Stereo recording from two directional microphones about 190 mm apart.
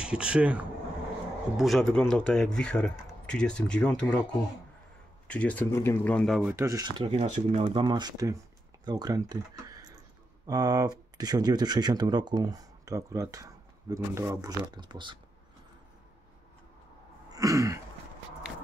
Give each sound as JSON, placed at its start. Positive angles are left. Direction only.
{"t": 0.0, "sound": "speech", "side_deg": -5}
{"t": 5.3, "sound": "speech", "side_deg": 5}
{"t": 6.5, "sound": "speech", "side_deg": -15}
{"t": 17.3, "sound": "a sound", "side_deg": -15}